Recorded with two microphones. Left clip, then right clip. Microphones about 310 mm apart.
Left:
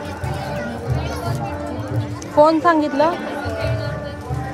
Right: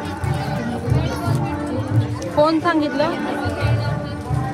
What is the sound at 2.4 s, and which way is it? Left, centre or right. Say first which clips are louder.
Speech: left 3 dB; left.